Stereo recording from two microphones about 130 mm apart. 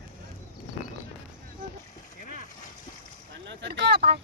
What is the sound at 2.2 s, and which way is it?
Boat, 90° left.